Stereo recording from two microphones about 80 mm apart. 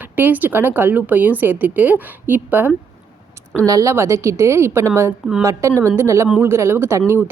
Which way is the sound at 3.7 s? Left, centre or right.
Right.